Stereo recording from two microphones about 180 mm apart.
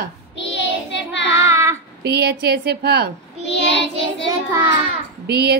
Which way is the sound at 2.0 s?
65° right (ahead or behind).